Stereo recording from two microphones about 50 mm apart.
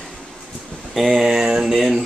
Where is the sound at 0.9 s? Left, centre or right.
Centre.